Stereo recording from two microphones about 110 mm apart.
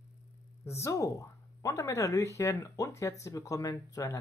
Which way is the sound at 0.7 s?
25° left (ahead or behind).